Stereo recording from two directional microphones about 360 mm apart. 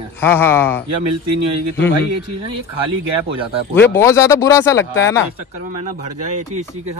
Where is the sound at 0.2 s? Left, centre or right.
Centre.